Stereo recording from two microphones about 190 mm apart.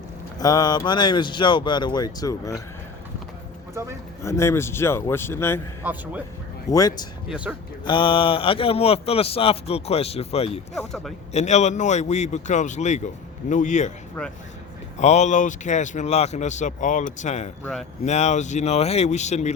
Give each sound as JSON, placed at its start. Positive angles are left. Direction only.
{"t": 0.3, "sound": "speech", "side_deg": 20}
{"t": 4.2, "sound": "a man's voice", "side_deg": 15}
{"t": 5.8, "sound": "speech", "side_deg": -10}
{"t": 6.7, "sound": "speech", "side_deg": 20}
{"t": 7.3, "sound": "speech", "side_deg": -5}
{"t": 7.9, "sound": "a man's voice", "side_deg": 25}
{"t": 10.8, "sound": "speech", "side_deg": 0}
{"t": 11.3, "sound": "a man's voice", "side_deg": 35}
{"t": 14.2, "sound": "a man's voice", "side_deg": 10}
{"t": 14.9, "sound": "a man's voice", "side_deg": 35}